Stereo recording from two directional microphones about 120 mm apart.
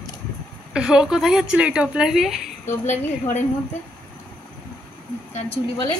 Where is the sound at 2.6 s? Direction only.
85° left.